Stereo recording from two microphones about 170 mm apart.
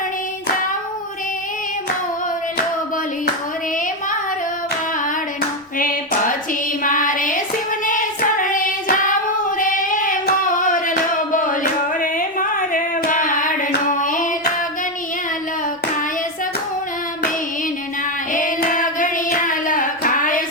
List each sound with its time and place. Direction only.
5.8 s a sound: 50° left (ahead or behind)
7.9 s child singing: 50° left (ahead or behind)
18.3 s hands: 50° left (ahead or behind)